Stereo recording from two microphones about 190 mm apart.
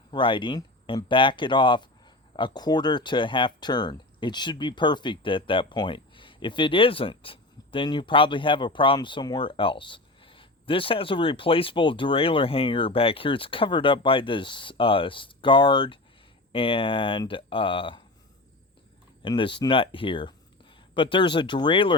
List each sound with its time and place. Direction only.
0.1 s speech: 25° left (ahead or behind)
19.2 s speech: 25° left (ahead or behind)